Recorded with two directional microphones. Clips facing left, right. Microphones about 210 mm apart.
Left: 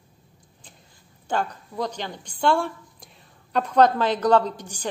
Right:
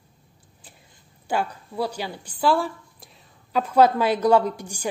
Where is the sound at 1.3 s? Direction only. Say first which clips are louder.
Right 1 dB; 10° right (ahead or behind).